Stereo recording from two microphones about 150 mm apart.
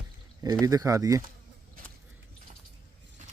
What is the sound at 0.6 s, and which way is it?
Speech, 25° right (ahead or behind).